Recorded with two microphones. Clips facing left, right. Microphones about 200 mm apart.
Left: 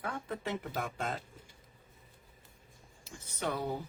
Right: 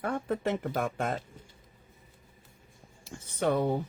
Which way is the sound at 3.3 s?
50° right (ahead or behind).